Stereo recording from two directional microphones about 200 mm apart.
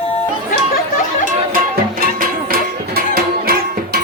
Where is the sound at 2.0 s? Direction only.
45° right (ahead or behind).